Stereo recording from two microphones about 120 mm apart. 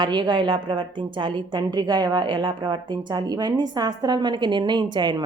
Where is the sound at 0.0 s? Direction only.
40° right (ahead or behind).